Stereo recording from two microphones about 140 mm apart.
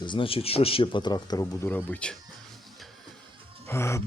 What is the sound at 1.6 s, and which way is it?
Speech, 15° left (ahead or behind).